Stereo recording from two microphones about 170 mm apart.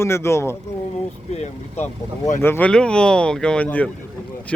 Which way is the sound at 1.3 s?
40° left (ahead or behind).